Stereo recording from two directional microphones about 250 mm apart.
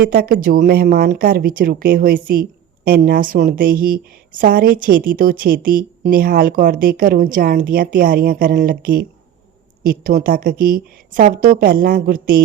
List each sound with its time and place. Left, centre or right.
0.0 s speech: right